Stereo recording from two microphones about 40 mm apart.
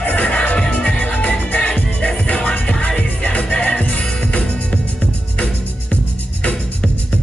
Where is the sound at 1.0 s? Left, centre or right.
Left.